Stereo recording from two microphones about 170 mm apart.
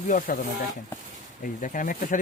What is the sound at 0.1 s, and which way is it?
Speech, 50° left (ahead or behind).